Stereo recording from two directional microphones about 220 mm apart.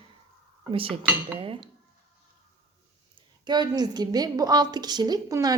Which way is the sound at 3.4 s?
20° right (ahead or behind).